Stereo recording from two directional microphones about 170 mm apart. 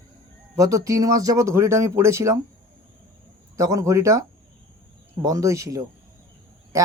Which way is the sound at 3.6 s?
20° right (ahead or behind).